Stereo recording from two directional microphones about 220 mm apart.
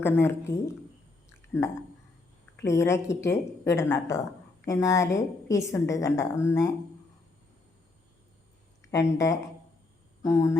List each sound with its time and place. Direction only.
0.0 s a woman's voice: 10° left (ahead or behind)
2.6 s a woman's voice: 10° left (ahead or behind)
8.9 s a woman's voice: 15° left (ahead or behind)